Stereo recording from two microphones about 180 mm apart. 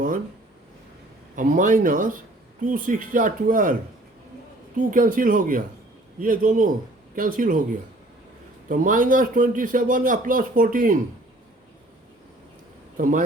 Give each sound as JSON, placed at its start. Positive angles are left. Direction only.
{"t": 1.4, "sound": "speech", "side_deg": -45}
{"t": 4.8, "sound": "speech", "side_deg": -50}
{"t": 8.7, "sound": "speech", "side_deg": -45}
{"t": 13.0, "sound": "speech", "side_deg": -50}